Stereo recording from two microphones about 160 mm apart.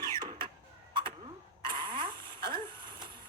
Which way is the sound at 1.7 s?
30° right (ahead or behind).